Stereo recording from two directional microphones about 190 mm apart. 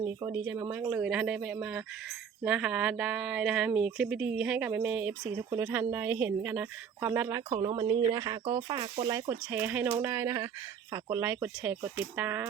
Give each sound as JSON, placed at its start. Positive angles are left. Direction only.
{"t": 0.4, "sound": "speech", "side_deg": -10}
{"t": 5.2, "sound": "speech", "side_deg": -15}
{"t": 7.5, "sound": "speech", "side_deg": -25}